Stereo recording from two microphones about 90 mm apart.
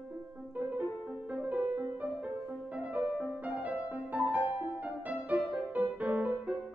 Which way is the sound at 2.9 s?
15° right (ahead or behind).